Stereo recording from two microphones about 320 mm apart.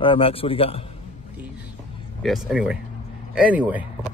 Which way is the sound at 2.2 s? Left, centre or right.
Centre.